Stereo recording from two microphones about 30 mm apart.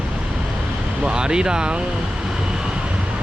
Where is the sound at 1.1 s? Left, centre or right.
Right.